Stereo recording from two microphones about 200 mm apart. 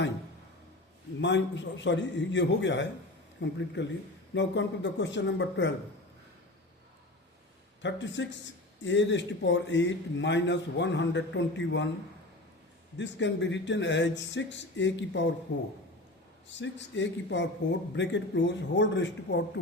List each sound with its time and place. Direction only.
1.2 s a man's voice: 65° left (ahead or behind)
7.8 s a man's voice: 65° left (ahead or behind)
13.0 s a man's voice: 65° left (ahead or behind)
16.6 s a man's voice: 65° left (ahead or behind)